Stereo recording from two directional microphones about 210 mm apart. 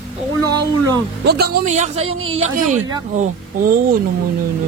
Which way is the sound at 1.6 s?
35° right (ahead or behind).